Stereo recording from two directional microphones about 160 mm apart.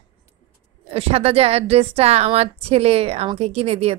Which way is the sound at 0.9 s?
40° right (ahead or behind).